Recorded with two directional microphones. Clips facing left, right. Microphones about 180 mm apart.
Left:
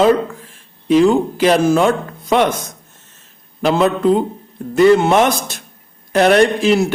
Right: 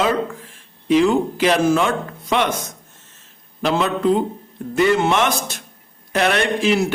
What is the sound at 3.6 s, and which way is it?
A man's voice, 45° left (ahead or behind).